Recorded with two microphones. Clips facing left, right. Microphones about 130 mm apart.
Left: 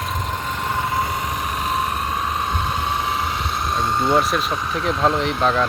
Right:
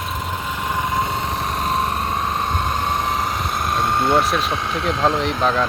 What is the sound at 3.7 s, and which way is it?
Vehicle, 55° right (ahead or behind).